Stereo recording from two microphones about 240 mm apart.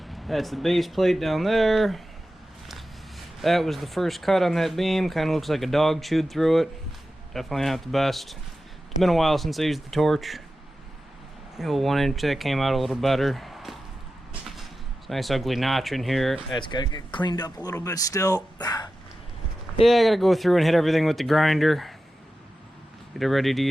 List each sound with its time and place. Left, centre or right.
0.1 s speech: centre
11.5 s speech: centre
15.0 s speech: centre
16.5 s speech: centre
19.8 s speech: centre
23.1 s speech: centre